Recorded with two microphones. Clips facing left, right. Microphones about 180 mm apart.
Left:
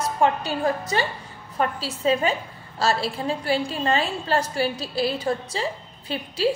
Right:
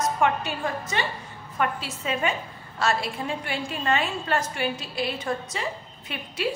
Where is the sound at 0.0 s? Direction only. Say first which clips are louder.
Left 2 dB; 35° left (ahead or behind).